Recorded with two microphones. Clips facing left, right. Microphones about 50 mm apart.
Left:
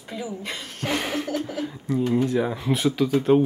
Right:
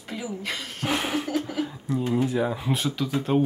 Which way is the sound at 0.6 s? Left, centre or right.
Centre.